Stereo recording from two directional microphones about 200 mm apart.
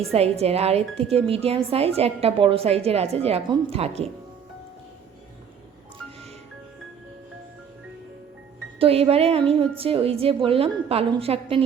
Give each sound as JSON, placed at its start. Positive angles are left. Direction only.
{"t": 0.1, "sound": "a woman's voice", "side_deg": -30}
{"t": 8.8, "sound": "a woman's voice", "side_deg": -30}